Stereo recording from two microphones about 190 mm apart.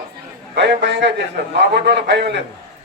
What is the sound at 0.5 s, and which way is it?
A man's voice, 65° right (ahead or behind).